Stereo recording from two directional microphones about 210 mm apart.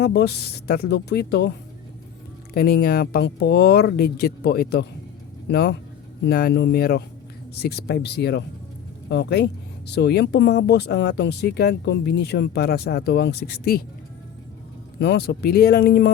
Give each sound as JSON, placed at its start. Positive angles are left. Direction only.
{"t": 0.0, "sound": "speech", "side_deg": 50}
{"t": 2.6, "sound": "speech", "side_deg": 45}
{"t": 14.9, "sound": "speech", "side_deg": 50}